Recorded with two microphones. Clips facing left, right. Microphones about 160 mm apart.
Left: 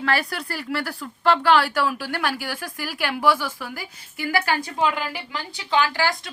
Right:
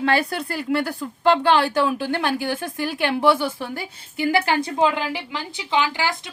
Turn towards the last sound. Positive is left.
turn(degrees=-20)  # may be behind; listen again after turning